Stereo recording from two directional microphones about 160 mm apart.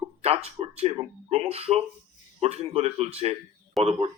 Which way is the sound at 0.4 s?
40° right (ahead or behind).